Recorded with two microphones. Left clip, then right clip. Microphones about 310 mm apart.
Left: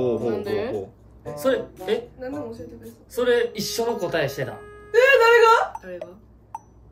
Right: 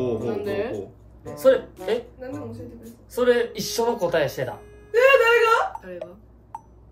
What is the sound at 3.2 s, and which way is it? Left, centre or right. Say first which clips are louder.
Speech: even; centre.